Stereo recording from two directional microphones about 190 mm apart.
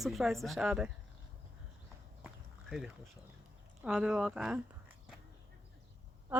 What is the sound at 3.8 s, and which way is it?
Speech, 5° right (ahead or behind).